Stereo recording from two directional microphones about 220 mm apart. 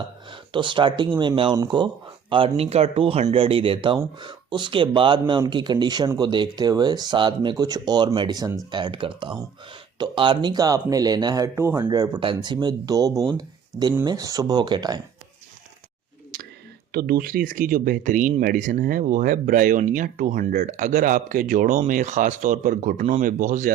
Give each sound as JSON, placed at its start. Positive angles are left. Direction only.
{"t": 0.3, "sound": "speech", "side_deg": -20}
{"t": 16.3, "sound": "whispering", "side_deg": -40}
{"t": 16.9, "sound": "speech", "side_deg": -40}